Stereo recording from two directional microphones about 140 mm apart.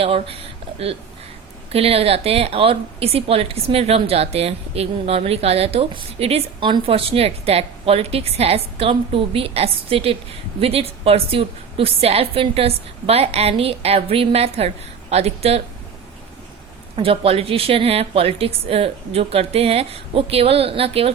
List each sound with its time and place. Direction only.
0.0 s a woman's voice: 45° right (ahead or behind)
16.9 s a woman's voice: 40° right (ahead or behind)